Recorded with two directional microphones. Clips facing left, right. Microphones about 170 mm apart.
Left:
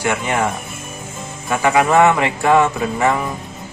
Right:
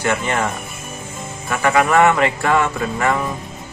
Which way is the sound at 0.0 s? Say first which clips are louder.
Left 1 dB; 15° left (ahead or behind).